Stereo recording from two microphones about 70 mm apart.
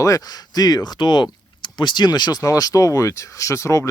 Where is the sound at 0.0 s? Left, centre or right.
Left.